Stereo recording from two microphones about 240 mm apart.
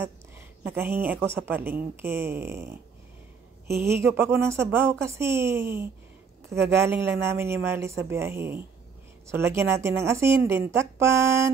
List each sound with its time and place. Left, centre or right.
0.7 s a woman's voice: centre
3.8 s a woman's voice: centre